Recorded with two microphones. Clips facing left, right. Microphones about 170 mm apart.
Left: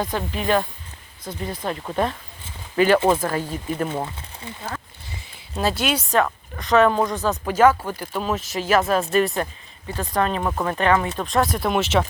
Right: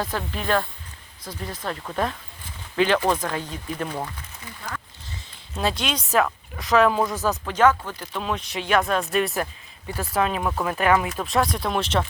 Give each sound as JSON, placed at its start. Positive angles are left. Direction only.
{"t": 0.0, "sound": "speech", "side_deg": 15}
{"t": 1.7, "sound": "speech", "side_deg": 15}
{"t": 3.8, "sound": "speech", "side_deg": 25}
{"t": 5.0, "sound": "a sound", "side_deg": 5}
{"t": 6.2, "sound": "speech", "side_deg": 0}
{"t": 7.3, "sound": "speech", "side_deg": 10}